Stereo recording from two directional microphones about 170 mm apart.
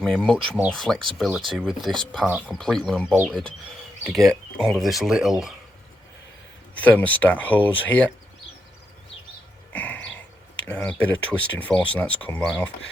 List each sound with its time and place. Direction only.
0.0 s speech: 5° left (ahead or behind)
6.7 s speech: 10° left (ahead or behind)
9.7 s a sound: 10° left (ahead or behind)
10.6 s speech: 5° left (ahead or behind)